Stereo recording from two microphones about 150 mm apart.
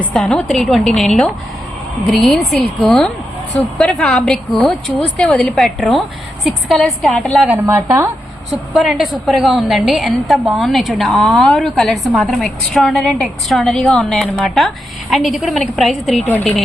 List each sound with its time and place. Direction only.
0.0 s a woman's voice: 5° left (ahead or behind)
7.4 s a woman's voice: 15° right (ahead or behind)
8.7 s a woman's voice: centre (ahead or behind)